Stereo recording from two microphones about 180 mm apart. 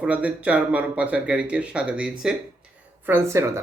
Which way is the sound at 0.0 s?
5° right (ahead or behind).